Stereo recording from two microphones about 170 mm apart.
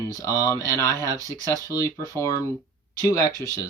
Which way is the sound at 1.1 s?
20° right (ahead or behind).